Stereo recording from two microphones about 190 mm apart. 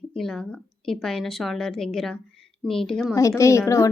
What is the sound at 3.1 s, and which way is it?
Speech, 15° left (ahead or behind).